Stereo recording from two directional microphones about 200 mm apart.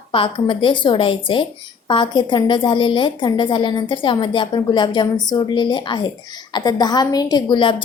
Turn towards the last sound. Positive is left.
turn(degrees=25)  # may be behind; listen again after turning